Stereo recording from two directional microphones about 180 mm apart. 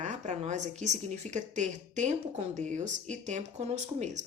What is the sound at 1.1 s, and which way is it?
Speech, 40° right (ahead or behind).